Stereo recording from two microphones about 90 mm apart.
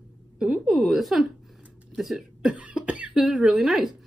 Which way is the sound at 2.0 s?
5° right (ahead or behind).